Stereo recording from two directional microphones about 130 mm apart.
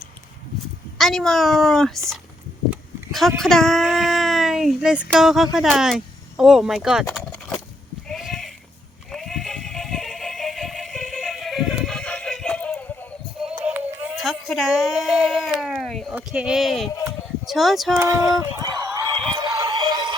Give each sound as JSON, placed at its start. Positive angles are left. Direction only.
{"t": 0.9, "sound": "speech", "side_deg": 0}
{"t": 8.1, "sound": "sheep", "side_deg": 0}
{"t": 9.1, "sound": "music", "side_deg": 0}
{"t": 11.9, "sound": "synthetic singing", "side_deg": 5}
{"t": 13.4, "sound": "music", "side_deg": -10}
{"t": 16.1, "sound": "speech", "side_deg": -5}
{"t": 18.0, "sound": "a sound", "side_deg": -25}
{"t": 19.3, "sound": "synthetic singing", "side_deg": -35}